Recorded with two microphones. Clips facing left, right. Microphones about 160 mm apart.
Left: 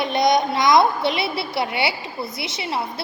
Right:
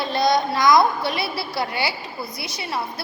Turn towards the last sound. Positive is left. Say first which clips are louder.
# left 2 dB
turn(degrees=25)  # may be behind; listen again after turning